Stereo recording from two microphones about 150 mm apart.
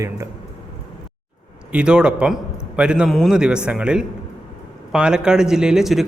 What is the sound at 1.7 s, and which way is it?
Speech, 5° right (ahead or behind).